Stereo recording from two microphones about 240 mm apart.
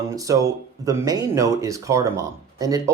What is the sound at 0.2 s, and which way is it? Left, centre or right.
Speech, centre.